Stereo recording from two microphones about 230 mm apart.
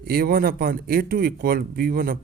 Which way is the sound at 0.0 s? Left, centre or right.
Right.